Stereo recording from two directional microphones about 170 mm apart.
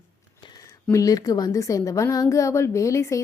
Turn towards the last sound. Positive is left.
turn(degrees=20)  # may be behind; listen again after turning